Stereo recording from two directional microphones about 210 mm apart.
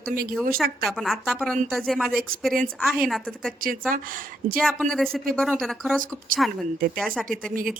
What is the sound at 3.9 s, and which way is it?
Speech, 40° right (ahead or behind).